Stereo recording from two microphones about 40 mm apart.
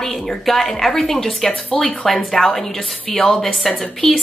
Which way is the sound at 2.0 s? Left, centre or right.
Centre.